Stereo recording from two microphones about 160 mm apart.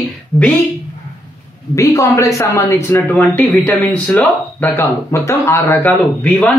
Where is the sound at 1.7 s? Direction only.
20° left (ahead or behind).